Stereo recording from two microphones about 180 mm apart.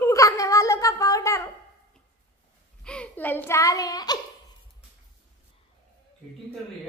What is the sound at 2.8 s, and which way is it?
Speech, 5° left (ahead or behind).